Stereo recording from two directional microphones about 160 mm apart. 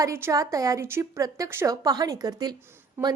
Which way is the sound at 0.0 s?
20° right (ahead or behind).